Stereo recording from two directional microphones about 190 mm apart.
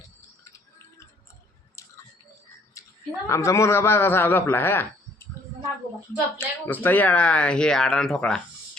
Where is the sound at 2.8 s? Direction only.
15° left (ahead or behind).